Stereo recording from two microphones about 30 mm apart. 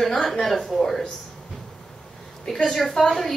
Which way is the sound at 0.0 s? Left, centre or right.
Centre.